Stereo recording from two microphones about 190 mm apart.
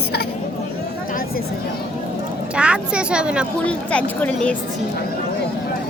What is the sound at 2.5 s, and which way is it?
Speech, 5° right (ahead or behind).